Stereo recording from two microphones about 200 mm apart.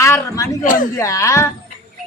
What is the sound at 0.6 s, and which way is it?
Speech, 40° left (ahead or behind).